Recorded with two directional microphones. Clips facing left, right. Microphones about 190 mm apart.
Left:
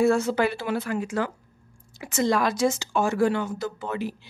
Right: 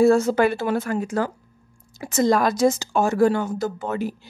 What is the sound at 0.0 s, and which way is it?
A woman's voice, 40° right (ahead or behind).